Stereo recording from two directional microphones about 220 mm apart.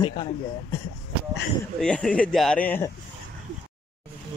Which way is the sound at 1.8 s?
5° left (ahead or behind).